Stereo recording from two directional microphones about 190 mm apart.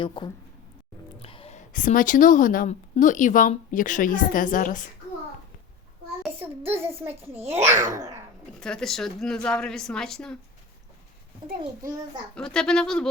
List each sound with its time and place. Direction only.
0.0 s a woman's voice: 25° left (ahead or behind); by 4.9 s 45° left (ahead or behind)
6.7 s speech: 10° right (ahead or behind)
8.6 s a woman's voice: 5° left (ahead or behind)
12.3 s a woman's voice: 5° left (ahead or behind)